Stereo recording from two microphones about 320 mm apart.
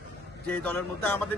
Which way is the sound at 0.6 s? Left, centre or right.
Centre.